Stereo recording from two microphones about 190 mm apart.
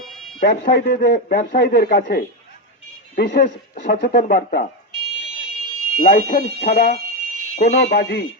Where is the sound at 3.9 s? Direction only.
40° left (ahead or behind).